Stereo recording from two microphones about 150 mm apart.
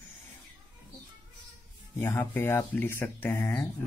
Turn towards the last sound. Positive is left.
turn(degrees=15)  # may be behind; listen again after turning